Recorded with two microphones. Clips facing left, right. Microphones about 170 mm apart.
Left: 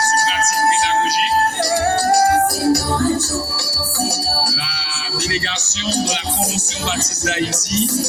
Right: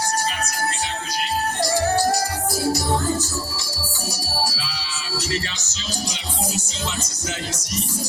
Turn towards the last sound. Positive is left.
turn(degrees=70)  # may be behind; listen again after turning